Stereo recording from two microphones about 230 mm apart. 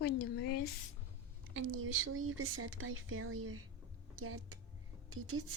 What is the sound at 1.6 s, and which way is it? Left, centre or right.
Speech, right.